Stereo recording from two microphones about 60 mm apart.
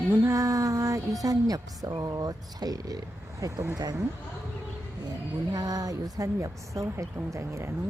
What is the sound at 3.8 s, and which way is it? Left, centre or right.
Speech, right.